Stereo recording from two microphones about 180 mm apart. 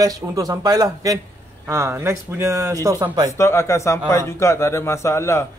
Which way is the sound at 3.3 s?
15° left (ahead or behind).